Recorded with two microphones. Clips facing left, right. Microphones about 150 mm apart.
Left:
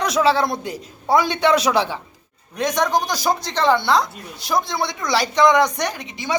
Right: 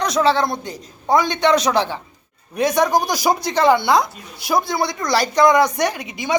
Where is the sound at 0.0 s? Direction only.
5° left (ahead or behind).